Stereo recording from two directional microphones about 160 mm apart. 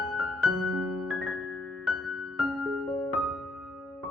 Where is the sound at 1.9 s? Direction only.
Centre (ahead or behind).